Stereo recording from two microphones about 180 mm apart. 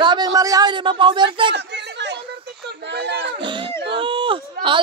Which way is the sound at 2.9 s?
70° right (ahead or behind).